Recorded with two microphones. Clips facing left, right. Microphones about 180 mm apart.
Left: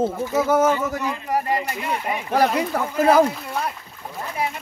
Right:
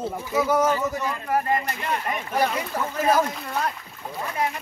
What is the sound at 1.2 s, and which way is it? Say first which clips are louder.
Speech: even; 15° left (ahead or behind).